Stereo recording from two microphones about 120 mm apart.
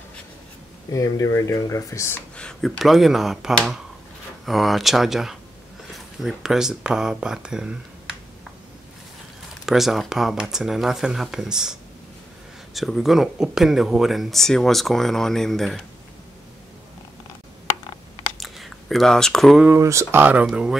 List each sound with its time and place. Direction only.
0.9 s speech: 30° left (ahead or behind)
2.3 s speech: 10° left (ahead or behind); by 8.2 s 5° right (ahead or behind)
9.7 s speech: centre (ahead or behind)
18.4 s a sound: centre (ahead or behind)
19.6 s speech: 20° right (ahead or behind)